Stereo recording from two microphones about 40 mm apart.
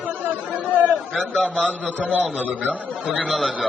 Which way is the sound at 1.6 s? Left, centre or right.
Right.